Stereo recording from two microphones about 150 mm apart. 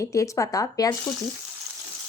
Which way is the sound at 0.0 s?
20° left (ahead or behind).